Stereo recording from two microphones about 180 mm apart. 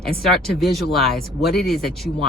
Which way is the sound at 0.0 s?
5° left (ahead or behind).